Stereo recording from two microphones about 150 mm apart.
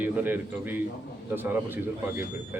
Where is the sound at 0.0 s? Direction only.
10° right (ahead or behind).